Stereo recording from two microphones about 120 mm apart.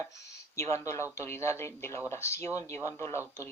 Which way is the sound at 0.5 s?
25° left (ahead or behind).